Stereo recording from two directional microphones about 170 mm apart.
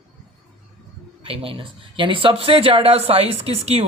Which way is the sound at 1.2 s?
35° right (ahead or behind).